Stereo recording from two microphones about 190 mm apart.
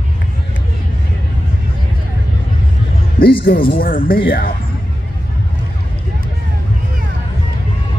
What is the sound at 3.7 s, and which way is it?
Speech, 50° left (ahead or behind).